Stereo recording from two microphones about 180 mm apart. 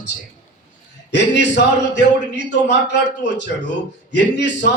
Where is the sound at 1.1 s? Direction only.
75° left (ahead or behind).